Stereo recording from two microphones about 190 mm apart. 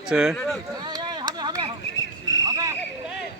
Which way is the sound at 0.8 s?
20° right (ahead or behind).